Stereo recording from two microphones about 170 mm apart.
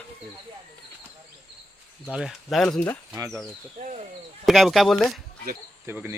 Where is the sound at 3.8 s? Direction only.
45° right (ahead or behind).